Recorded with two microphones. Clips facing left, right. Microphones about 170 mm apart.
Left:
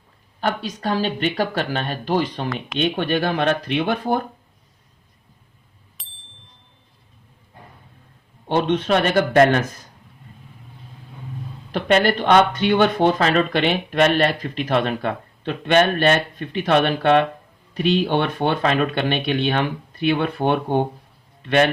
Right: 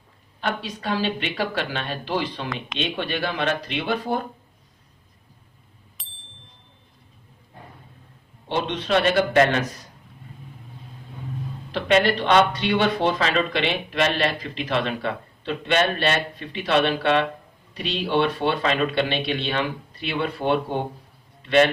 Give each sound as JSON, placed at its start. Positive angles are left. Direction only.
{"t": 0.4, "sound": "speech", "side_deg": 40}
{"t": 6.0, "sound": "bicycle bell", "side_deg": 0}
{"t": 8.4, "sound": "speech", "side_deg": 50}
{"t": 11.7, "sound": "a man's voice", "side_deg": 45}